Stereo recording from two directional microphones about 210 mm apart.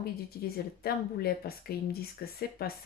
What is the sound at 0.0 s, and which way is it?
Speech, 45° left (ahead or behind).